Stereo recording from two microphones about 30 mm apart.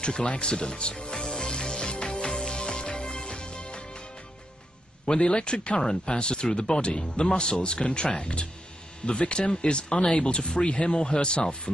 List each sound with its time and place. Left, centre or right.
0.0 s speech: left
1.1 s music: left
5.0 s speech: left
5.8 s speech: left